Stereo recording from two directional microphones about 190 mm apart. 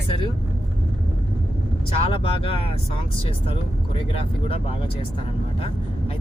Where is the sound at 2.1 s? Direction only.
30° left (ahead or behind).